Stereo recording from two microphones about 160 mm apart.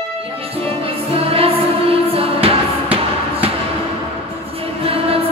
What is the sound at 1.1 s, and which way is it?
Music, 35° right (ahead or behind).